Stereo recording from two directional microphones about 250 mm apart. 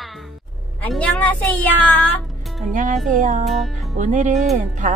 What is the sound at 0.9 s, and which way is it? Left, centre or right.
Speech, centre.